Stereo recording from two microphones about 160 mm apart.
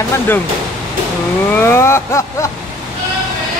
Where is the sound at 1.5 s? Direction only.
15° left (ahead or behind).